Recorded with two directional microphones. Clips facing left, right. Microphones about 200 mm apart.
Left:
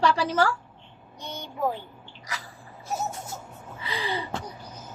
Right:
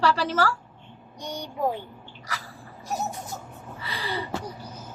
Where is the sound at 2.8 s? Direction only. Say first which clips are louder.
Right 1 dB; 15° right (ahead or behind).